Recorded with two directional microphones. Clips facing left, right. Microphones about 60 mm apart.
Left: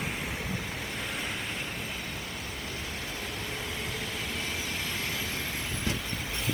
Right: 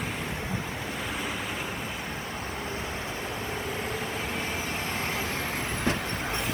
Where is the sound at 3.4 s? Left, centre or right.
Right.